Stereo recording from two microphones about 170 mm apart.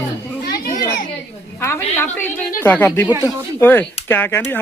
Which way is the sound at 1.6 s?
15° left (ahead or behind).